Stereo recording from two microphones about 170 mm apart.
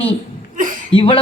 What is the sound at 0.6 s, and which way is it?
Speech, 50° right (ahead or behind).